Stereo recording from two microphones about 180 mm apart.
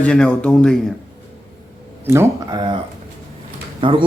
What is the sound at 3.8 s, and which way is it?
Speech, 25° right (ahead or behind).